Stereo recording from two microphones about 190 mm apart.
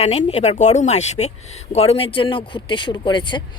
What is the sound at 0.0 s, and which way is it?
A woman's voice, 35° left (ahead or behind).